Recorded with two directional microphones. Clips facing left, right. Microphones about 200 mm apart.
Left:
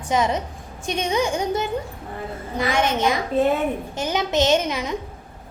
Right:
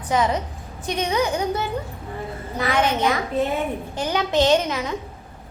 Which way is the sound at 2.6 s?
25° left (ahead or behind).